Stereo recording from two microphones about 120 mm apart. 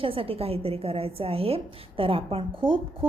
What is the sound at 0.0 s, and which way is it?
A woman's voice, 50° right (ahead or behind).